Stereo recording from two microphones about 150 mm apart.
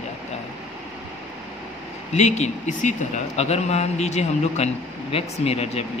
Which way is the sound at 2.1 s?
50° left (ahead or behind).